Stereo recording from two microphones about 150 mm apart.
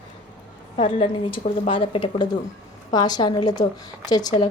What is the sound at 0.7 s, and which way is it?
A woman's voice, 35° left (ahead or behind).